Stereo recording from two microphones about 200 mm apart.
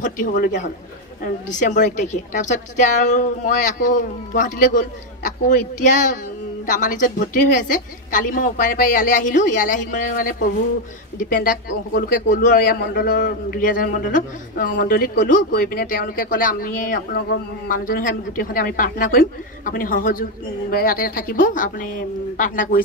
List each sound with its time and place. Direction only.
0.0 s a woman's voice: 40° left (ahead or behind)